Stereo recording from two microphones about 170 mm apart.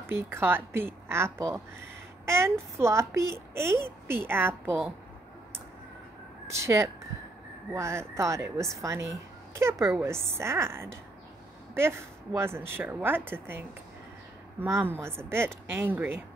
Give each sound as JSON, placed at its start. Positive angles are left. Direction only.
{"t": 0.0, "sound": "a woman's voice", "side_deg": -15}
{"t": 6.4, "sound": "a woman's voice", "side_deg": -15}
{"t": 12.4, "sound": "a woman's voice", "side_deg": -15}